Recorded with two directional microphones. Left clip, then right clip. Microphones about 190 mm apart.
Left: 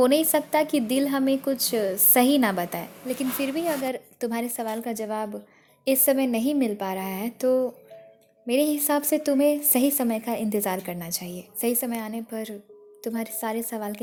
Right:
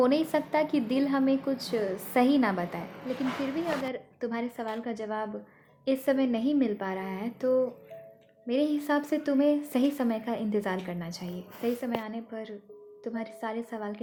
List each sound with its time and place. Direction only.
0.0 s a woman's voice: 40° left (ahead or behind)